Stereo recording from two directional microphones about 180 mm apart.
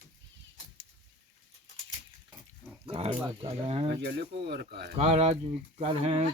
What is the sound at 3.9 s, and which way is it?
Speech, 70° right (ahead or behind).